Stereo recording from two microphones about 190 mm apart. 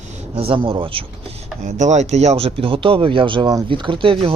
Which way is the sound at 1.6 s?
40° right (ahead or behind).